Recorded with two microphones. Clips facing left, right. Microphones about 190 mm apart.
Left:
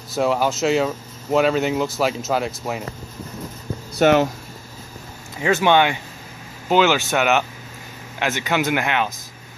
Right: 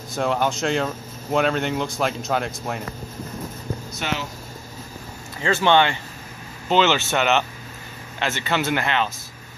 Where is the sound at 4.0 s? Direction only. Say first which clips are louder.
Left 15 dB; 50° left (ahead or behind).